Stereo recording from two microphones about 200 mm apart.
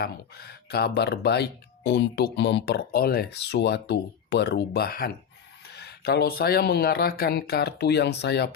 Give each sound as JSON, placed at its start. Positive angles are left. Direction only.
{"t": 0.0, "sound": "speech", "side_deg": 50}